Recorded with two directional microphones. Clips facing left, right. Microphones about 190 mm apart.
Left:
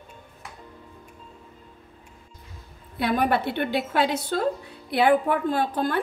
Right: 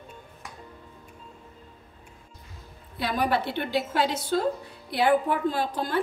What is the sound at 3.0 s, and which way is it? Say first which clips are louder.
A woman's voice: left 3 dB; 55° left (ahead or behind).